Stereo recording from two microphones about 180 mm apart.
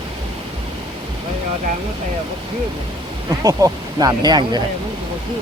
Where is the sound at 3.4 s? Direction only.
20° right (ahead or behind).